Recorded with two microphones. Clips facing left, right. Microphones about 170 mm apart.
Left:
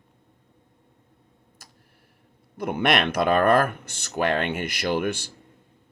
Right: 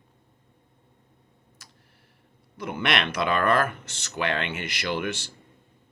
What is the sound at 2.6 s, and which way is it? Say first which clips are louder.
Speech: left 5 dB; 55° left (ahead or behind).